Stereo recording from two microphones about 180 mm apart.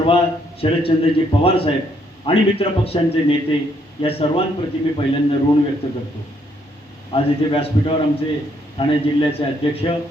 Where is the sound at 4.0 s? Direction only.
30° left (ahead or behind).